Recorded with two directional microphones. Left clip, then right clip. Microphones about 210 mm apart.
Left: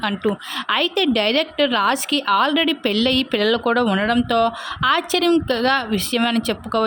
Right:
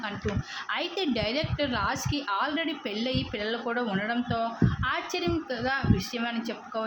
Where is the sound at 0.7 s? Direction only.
40° left (ahead or behind).